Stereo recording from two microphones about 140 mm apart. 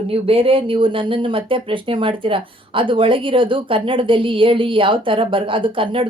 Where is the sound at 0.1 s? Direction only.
40° right (ahead or behind).